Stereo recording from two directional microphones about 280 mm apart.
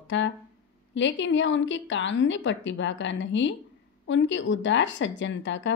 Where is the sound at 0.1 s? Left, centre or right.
Left.